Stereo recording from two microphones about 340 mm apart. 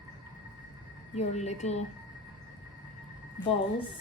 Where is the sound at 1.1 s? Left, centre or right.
Centre.